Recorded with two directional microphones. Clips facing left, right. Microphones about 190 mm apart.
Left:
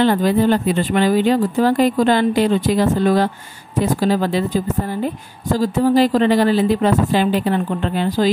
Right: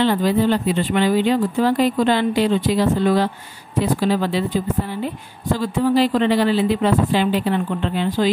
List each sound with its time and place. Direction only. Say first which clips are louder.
0.0 s a woman's voice: left 2 dB; 50° left (ahead or behind)